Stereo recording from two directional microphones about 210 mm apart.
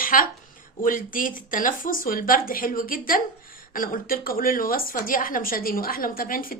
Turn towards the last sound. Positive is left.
turn(degrees=45)  # may be behind; listen again after turning